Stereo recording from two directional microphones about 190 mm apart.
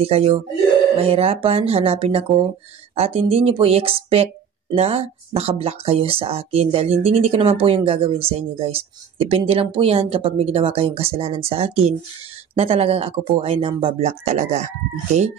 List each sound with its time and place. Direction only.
0.0 s speech: 30° right (ahead or behind)